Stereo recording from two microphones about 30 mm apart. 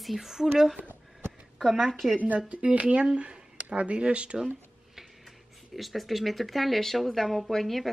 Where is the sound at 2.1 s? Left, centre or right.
Right.